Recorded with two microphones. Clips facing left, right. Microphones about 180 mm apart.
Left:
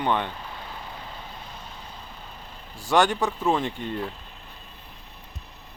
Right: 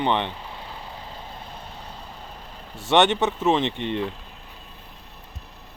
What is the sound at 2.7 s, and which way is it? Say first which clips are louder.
Speech: right 2 dB; 25° right (ahead or behind).